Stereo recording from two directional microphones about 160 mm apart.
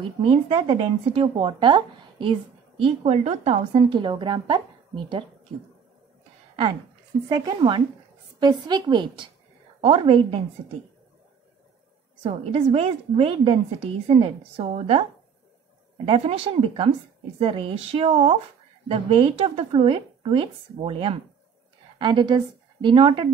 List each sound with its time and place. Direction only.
0.2 s a woman's voice: 35° right (ahead or behind)
7.2 s a woman's voice: 25° right (ahead or behind)
12.2 s a woman's voice: 35° right (ahead or behind)
16.1 s a woman's voice: 35° right (ahead or behind)